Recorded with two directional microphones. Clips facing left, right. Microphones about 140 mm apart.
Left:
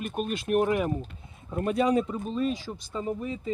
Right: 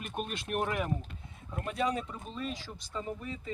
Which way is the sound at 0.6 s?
25° left (ahead or behind).